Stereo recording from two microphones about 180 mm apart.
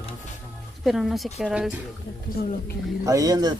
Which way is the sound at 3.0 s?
20° right (ahead or behind).